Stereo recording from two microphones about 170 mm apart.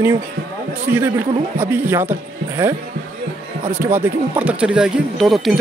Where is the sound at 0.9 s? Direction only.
15° right (ahead or behind).